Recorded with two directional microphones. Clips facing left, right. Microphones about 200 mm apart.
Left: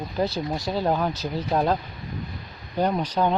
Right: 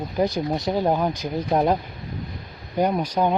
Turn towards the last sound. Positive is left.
turn(degrees=-10)  # may be behind; listen again after turning